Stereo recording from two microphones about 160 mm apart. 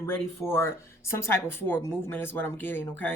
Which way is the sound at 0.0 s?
15° left (ahead or behind).